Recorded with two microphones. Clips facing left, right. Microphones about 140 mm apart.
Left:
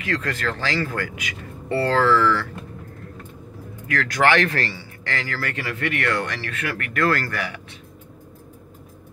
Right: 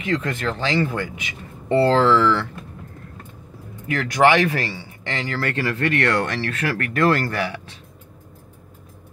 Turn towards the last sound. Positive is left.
turn(degrees=-30)  # may be behind; listen again after turning